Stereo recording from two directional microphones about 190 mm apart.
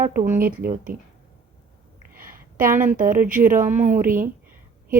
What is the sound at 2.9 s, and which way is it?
Speech, 45° right (ahead or behind).